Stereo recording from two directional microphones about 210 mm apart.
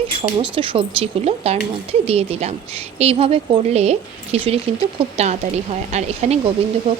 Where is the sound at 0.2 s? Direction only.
25° right (ahead or behind).